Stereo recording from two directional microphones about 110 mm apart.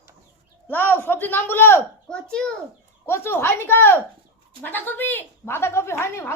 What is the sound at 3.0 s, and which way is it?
A woman's voice, 20° left (ahead or behind).